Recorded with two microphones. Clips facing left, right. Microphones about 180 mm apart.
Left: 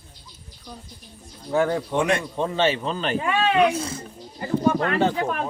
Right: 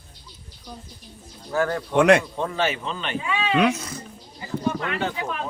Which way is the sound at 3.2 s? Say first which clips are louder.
Left 4 dB; 60° left (ahead or behind).